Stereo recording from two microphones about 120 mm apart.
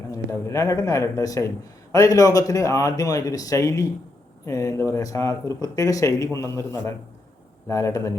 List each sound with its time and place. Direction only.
0.1 s speech: 25° left (ahead or behind)